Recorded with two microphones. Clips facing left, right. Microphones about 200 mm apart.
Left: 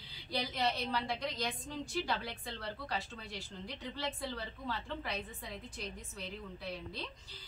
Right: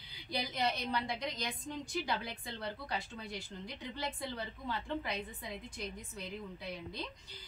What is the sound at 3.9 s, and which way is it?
A woman's voice, 15° right (ahead or behind).